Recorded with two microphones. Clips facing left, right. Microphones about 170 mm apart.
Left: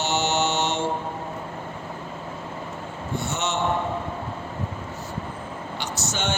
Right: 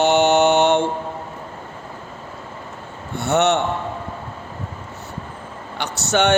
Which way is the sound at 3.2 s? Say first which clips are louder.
Right 11 dB; 65° right (ahead or behind).